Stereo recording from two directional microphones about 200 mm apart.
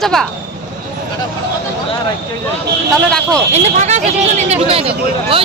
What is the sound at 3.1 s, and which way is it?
Speech, 5° left (ahead or behind).